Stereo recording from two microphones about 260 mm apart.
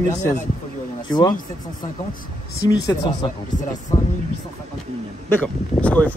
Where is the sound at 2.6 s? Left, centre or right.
Centre.